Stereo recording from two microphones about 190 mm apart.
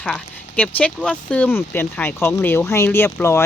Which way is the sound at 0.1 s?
5° left (ahead or behind).